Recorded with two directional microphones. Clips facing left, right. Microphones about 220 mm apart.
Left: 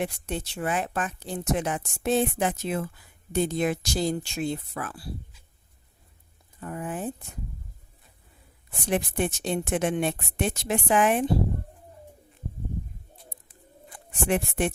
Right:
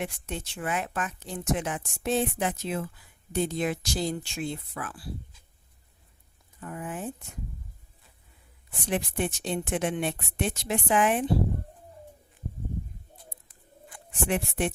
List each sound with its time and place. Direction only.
0.0 s speech: 35° left (ahead or behind)
6.6 s speech: 40° left (ahead or behind)
8.9 s speech: 45° left (ahead or behind)
14.3 s speech: 45° left (ahead or behind)